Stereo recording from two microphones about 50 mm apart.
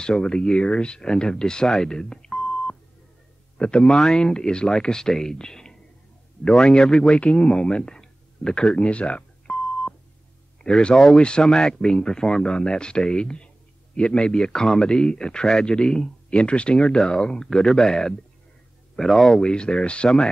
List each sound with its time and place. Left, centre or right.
0.0 s speech: centre
19.5 s speech: centre